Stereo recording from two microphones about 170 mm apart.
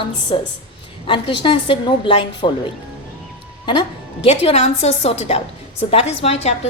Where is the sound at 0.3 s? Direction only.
30° left (ahead or behind).